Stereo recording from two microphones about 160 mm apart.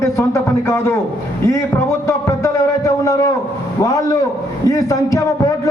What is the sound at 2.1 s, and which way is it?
A man's voice, 20° left (ahead or behind).